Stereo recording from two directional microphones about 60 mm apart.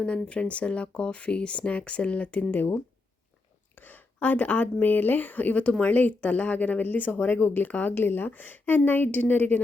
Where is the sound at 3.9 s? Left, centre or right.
Left.